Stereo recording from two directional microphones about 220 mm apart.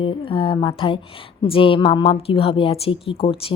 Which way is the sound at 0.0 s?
25° left (ahead or behind).